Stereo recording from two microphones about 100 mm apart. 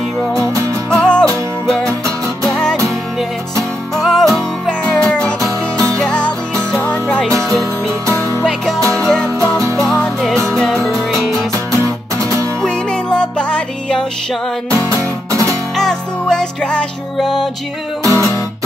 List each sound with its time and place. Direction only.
0.8 s music: 10° left (ahead or behind)
3.9 s music: 5° left (ahead or behind)
8.1 s music: 30° left (ahead or behind)
9.0 s music: 10° left (ahead or behind)
9.6 s music: 30° right (ahead or behind)
10.2 s music: centre (ahead or behind)
10.9 s music: 30° right (ahead or behind)
12.6 s music: 10° left (ahead or behind)
14.8 s music: 35° right (ahead or behind)
15.7 s music: 5° left (ahead or behind)
18.0 s music: 30° right (ahead or behind)